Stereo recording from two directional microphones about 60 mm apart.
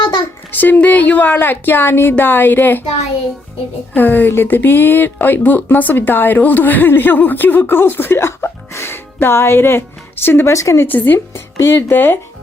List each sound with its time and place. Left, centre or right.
0.5 s a woman's voice: left
3.9 s a woman's voice: left
10.4 s speech: left
10.8 s a woman's voice: left